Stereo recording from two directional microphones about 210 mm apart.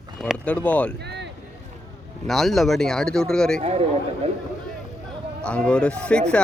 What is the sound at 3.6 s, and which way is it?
Speech, 25° right (ahead or behind).